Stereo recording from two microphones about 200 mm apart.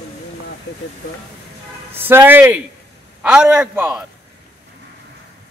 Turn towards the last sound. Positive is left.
turn(degrees=-5)  # may be behind; listen again after turning